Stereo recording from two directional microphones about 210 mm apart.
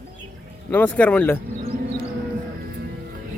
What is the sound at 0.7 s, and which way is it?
Speech, 5° left (ahead or behind).